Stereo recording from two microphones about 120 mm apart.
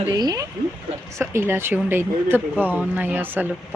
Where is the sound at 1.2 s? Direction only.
20° right (ahead or behind).